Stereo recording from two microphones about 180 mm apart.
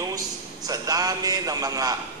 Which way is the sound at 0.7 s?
20° right (ahead or behind).